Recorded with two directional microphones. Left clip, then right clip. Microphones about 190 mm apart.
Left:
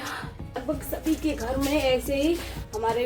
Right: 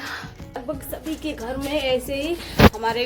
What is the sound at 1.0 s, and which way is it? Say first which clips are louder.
A woman's voice: left 2 dB; centre (ahead or behind).